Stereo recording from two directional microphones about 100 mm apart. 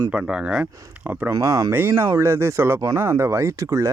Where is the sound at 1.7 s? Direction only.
25° right (ahead or behind).